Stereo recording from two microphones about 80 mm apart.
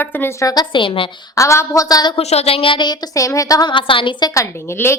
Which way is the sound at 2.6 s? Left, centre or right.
Left.